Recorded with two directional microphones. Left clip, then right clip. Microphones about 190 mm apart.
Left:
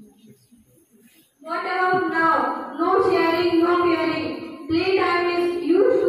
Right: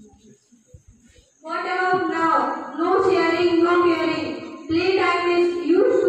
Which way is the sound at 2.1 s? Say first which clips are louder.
Even; 15° left (ahead or behind).